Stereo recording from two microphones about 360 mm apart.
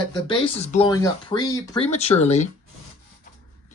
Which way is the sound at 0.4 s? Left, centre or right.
Centre.